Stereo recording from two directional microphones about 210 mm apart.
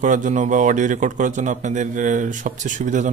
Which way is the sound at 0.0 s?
35° right (ahead or behind).